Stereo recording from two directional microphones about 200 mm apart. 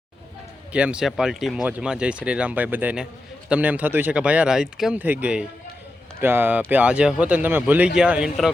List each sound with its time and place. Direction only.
0.7 s speech: 5° right (ahead or behind)